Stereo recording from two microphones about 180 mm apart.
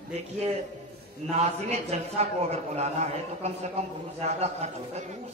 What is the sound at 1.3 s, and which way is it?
A man's voice, 35° right (ahead or behind).